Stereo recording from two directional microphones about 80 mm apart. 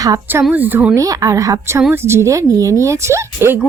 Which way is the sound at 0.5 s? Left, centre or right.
Right.